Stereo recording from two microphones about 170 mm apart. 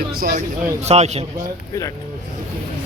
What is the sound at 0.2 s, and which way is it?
A man's voice, 50° right (ahead or behind).